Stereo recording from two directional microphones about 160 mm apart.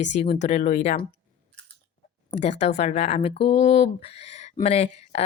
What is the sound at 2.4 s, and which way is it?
Speech, 45° left (ahead or behind).